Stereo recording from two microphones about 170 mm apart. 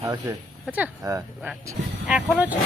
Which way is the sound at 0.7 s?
15° right (ahead or behind).